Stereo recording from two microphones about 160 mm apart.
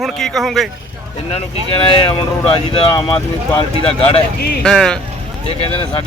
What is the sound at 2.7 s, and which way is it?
Speech, 30° left (ahead or behind).